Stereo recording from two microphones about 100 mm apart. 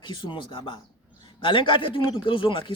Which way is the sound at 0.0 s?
50° left (ahead or behind).